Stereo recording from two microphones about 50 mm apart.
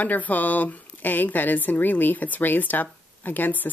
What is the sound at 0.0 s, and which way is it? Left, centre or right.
Speech, left.